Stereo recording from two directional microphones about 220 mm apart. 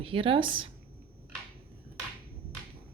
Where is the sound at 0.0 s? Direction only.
25° right (ahead or behind).